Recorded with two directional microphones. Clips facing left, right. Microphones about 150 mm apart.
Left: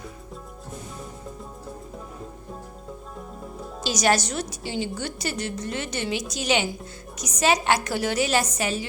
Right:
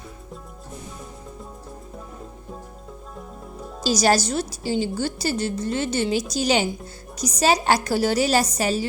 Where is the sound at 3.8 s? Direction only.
35° right (ahead or behind).